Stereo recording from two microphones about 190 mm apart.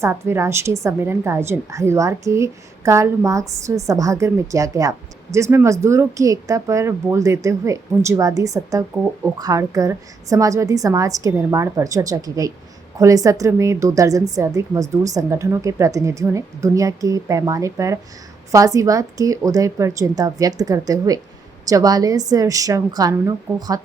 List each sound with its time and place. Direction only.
0.0 s a woman's voice: 15° right (ahead or behind)